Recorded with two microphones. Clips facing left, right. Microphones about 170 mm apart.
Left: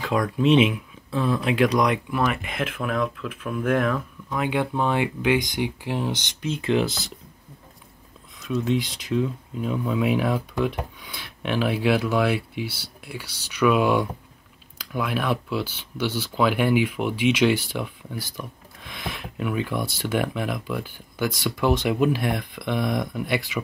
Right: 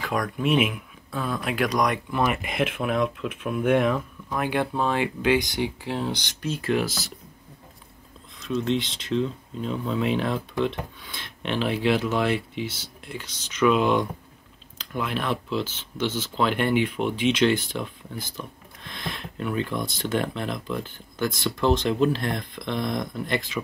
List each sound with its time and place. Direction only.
0.0 s speech: 25° left (ahead or behind)
2.4 s speech: 15° right (ahead or behind)
4.5 s speech: 15° left (ahead or behind)
8.5 s speech: 10° left (ahead or behind)